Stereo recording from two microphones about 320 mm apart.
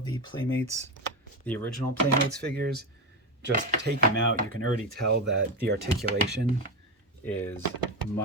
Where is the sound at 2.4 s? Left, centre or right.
Right.